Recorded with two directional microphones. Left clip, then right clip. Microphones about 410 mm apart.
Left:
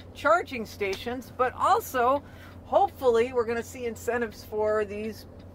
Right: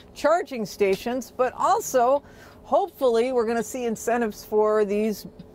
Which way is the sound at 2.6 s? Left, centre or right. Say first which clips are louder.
Right 1 dB; right.